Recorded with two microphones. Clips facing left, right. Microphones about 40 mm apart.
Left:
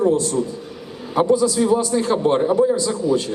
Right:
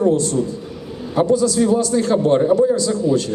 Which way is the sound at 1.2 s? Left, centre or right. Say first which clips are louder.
Right 1 dB; centre.